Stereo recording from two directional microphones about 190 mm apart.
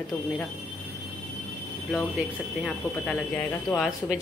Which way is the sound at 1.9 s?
5° left (ahead or behind).